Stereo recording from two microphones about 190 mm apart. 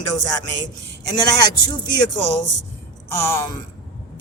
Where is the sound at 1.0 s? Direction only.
20° left (ahead or behind).